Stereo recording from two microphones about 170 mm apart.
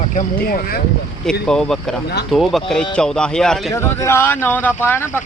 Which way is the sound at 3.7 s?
15° left (ahead or behind).